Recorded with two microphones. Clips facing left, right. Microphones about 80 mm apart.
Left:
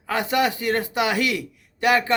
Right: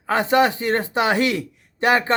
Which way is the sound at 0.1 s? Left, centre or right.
Right.